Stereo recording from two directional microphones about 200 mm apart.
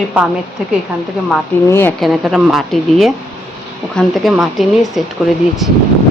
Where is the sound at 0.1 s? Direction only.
5° right (ahead or behind).